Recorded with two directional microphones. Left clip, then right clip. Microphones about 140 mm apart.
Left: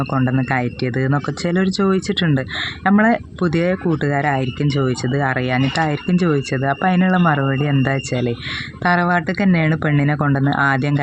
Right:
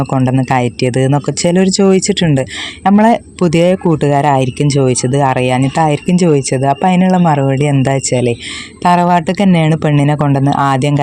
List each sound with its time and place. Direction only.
0.1 s speech: 45° right (ahead or behind)